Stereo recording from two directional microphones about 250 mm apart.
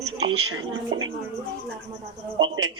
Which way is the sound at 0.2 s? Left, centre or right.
Right.